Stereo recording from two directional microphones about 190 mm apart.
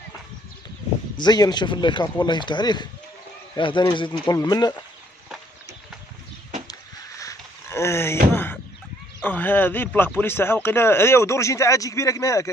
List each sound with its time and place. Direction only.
1.1 s speech: 20° left (ahead or behind)
6.7 s a sound: 15° left (ahead or behind)
9.2 s speech: 10° left (ahead or behind)